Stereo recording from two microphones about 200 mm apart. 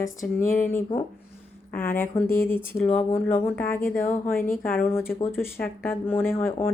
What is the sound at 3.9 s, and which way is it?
Speech, 40° left (ahead or behind).